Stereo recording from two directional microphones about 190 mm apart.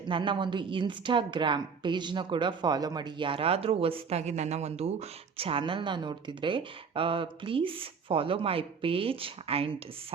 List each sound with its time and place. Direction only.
0.1 s a woman's voice: 25° right (ahead or behind)